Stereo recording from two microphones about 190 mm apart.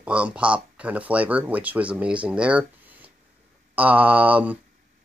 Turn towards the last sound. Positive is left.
turn(degrees=-5)  # may be behind; listen again after turning